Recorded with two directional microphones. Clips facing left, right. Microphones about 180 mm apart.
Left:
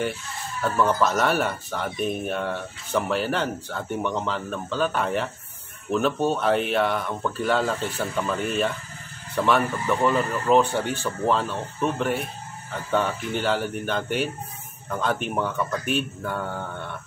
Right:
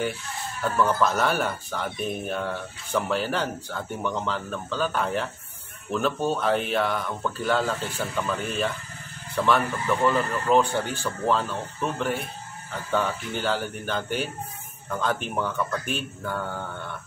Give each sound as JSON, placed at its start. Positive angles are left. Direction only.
{"t": 0.7, "sound": "speech", "side_deg": 0}